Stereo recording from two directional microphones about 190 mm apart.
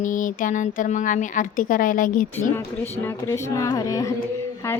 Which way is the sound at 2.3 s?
10° left (ahead or behind).